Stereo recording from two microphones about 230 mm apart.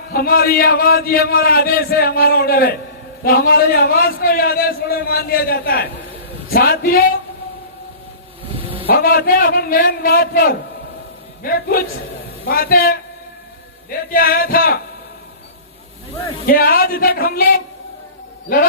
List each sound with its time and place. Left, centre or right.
0.1 s a man's voice: left
8.5 s vehicle: right
8.9 s a man's voice: left
16.5 s a man's voice: left